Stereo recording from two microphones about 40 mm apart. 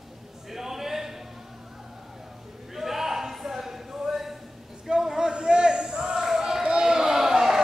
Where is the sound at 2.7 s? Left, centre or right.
Centre.